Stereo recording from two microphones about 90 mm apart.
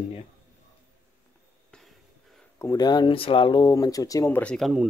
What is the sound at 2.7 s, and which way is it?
Speech, 50° left (ahead or behind).